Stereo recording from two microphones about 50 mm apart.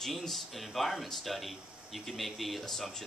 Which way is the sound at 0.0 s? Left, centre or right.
Centre.